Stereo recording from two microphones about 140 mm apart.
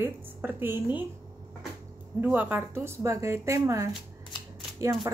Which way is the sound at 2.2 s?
10° right (ahead or behind).